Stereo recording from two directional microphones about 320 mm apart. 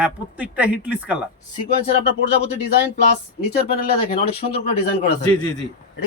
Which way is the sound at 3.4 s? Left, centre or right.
Left.